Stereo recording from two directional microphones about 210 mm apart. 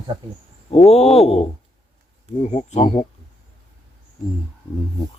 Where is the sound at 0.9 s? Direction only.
30° left (ahead or behind).